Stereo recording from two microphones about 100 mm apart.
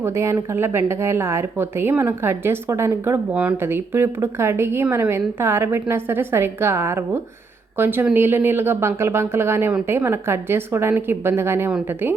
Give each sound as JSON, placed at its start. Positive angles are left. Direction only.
{"t": 0.0, "sound": "a woman's voice", "side_deg": -30}